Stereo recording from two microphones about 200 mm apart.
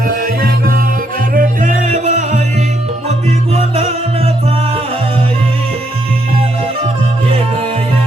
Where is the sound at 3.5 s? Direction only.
30° right (ahead or behind).